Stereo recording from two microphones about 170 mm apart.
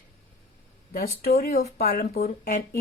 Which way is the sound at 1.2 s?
65° left (ahead or behind).